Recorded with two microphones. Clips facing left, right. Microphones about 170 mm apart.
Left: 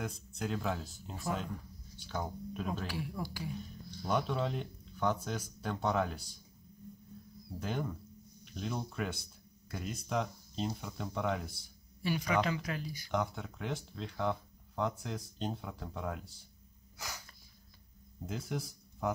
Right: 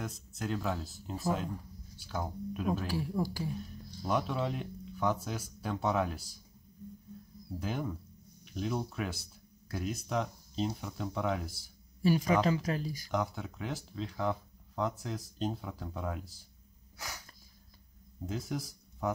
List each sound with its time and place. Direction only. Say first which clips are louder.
0.0 s speech: even; centre (ahead or behind)
2.9 s speech: right 6 dB; 35° right (ahead or behind)
4.1 s speech: right 1 dB; 5° right (ahead or behind)
7.6 s speech: right 1 dB; 5° right (ahead or behind)
12.0 s speech: right 5 dB; 40° right (ahead or behind)
13.1 s speech: even; centre (ahead or behind)
18.2 s speech: right 2 dB; centre (ahead or behind)